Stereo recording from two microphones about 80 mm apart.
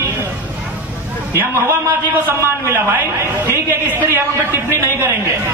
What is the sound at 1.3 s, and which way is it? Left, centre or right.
A man's voice, right.